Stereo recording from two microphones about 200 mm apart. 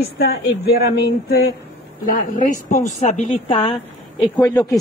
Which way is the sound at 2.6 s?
40° left (ahead or behind).